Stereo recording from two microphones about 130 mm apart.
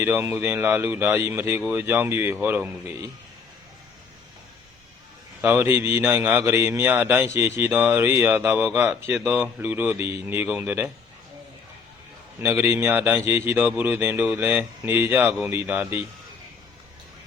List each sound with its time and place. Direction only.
0.0 s speech: 15° right (ahead or behind)
5.4 s speech: 15° right (ahead or behind)
12.4 s speech: 15° right (ahead or behind)